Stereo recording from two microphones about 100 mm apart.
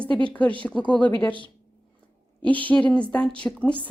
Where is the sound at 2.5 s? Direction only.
15° left (ahead or behind).